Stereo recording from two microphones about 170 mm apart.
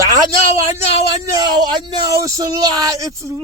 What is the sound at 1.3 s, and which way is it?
Speech, 25° right (ahead or behind).